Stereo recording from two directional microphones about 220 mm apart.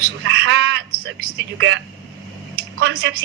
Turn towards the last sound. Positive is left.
turn(degrees=-55)  # may be behind; listen again after turning